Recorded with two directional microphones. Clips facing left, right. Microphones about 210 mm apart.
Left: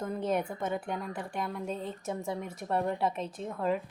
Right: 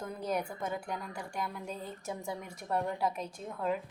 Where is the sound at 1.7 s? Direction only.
30° left (ahead or behind).